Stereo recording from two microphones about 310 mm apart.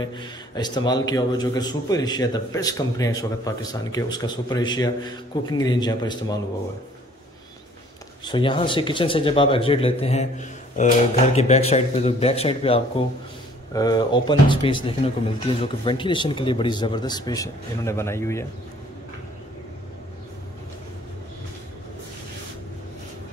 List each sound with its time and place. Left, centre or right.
0.0 s speech: centre
8.3 s speech: centre